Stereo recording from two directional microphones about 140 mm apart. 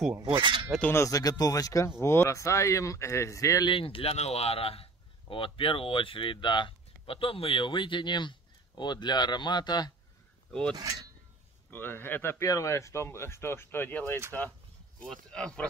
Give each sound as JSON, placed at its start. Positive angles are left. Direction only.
{"t": 0.2, "sound": "speech", "side_deg": -35}
{"t": 0.8, "sound": "speech", "side_deg": 20}
{"t": 3.7, "sound": "speech", "side_deg": 40}
{"t": 10.7, "sound": "speech", "side_deg": -30}
{"t": 11.7, "sound": "speech", "side_deg": 15}